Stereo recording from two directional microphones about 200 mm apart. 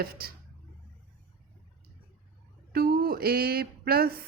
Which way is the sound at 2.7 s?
50° right (ahead or behind).